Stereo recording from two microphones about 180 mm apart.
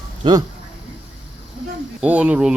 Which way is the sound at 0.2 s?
30° right (ahead or behind).